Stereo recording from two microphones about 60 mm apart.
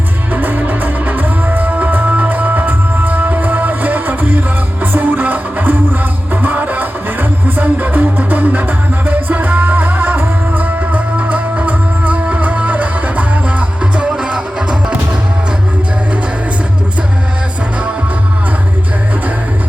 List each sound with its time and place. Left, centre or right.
0.3 s music: right; by 14.9 s centre